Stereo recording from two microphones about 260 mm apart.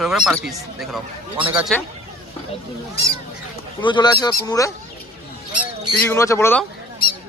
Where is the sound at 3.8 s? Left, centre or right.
Centre.